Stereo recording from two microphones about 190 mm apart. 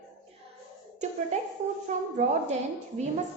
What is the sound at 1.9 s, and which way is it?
Speech, 40° right (ahead or behind).